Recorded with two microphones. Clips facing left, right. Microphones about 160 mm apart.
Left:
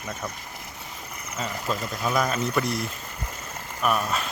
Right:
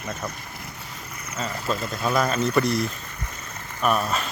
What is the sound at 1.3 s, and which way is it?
Speech, 15° left (ahead or behind).